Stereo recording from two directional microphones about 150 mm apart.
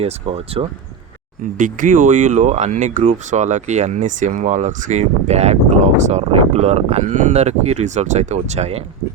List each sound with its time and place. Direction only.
0.0 s speech: 40° right (ahead or behind)
1.5 s speech: 60° right (ahead or behind)